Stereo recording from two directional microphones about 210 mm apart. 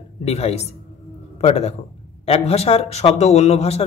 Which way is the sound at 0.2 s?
30° left (ahead or behind).